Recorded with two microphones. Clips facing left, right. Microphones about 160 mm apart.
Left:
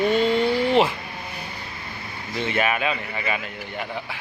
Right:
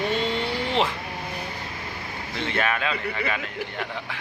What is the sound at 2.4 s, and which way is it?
Speech, 10° left (ahead or behind).